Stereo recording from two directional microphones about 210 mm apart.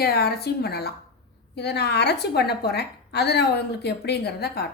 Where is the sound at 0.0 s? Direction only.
50° left (ahead or behind).